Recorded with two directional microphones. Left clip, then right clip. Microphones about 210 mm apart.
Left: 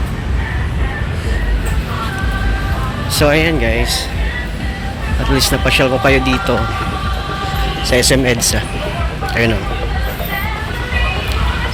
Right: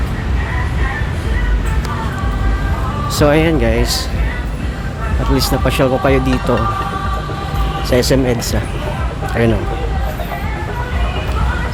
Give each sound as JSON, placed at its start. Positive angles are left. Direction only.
{"t": 3.2, "sound": "speech", "side_deg": -15}
{"t": 5.4, "sound": "speech", "side_deg": -10}
{"t": 7.9, "sound": "speech", "side_deg": -10}